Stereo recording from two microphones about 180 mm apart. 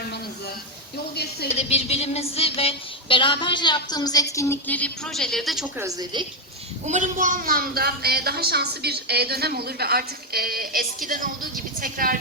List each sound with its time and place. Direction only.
1.1 s speech: 65° left (ahead or behind)
1.5 s a woman's voice: 35° left (ahead or behind); by 5.6 s centre (ahead or behind)
5.7 s a woman's voice: 20° right (ahead or behind)
6.8 s a woman's voice: 40° right (ahead or behind)